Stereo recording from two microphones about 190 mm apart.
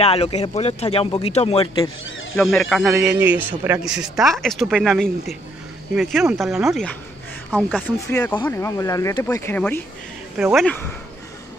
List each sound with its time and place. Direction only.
0.0 s speech: 30° left (ahead or behind)
2.3 s speech: centre (ahead or behind)
6.3 s speech: centre (ahead or behind)
10.3 s speech: centre (ahead or behind)